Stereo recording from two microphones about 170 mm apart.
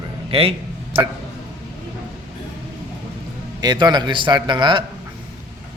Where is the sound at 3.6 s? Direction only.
25° right (ahead or behind).